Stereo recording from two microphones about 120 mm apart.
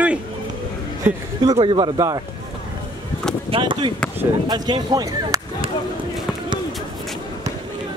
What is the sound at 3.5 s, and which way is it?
Speech, 40° right (ahead or behind).